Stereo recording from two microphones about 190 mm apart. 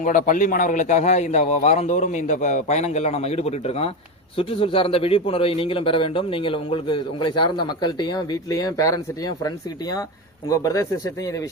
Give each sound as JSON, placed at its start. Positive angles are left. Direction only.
{"t": 0.0, "sound": "a man's voice", "side_deg": 45}
{"t": 10.5, "sound": "speech", "side_deg": 15}